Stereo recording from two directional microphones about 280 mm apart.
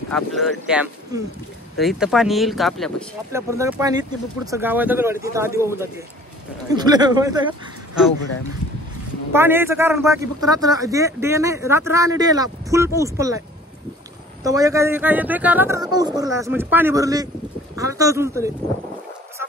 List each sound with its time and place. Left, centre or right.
0.1 s speech: centre
9.3 s speech: centre
14.4 s speech: centre